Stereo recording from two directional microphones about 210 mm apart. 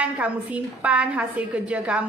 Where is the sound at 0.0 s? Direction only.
5° right (ahead or behind).